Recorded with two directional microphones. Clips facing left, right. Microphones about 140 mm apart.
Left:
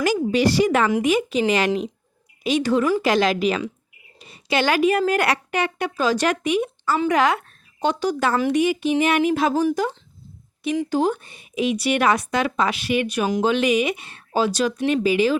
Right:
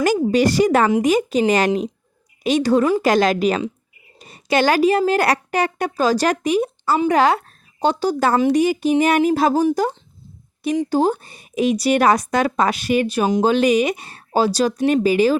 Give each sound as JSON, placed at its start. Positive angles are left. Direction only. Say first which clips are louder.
{"t": 0.0, "sound": "a woman's voice", "louder": "right 3 dB", "side_deg": -45}
{"t": 10.8, "sound": "a woman's voice", "louder": "right 3 dB", "side_deg": -35}